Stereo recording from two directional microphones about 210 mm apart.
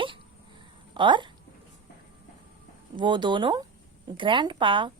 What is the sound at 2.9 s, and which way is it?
A woman's voice, 20° right (ahead or behind).